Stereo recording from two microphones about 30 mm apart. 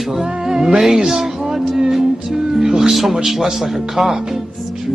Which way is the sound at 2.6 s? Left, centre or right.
Right.